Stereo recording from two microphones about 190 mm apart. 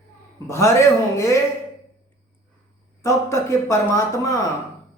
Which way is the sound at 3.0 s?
15° left (ahead or behind).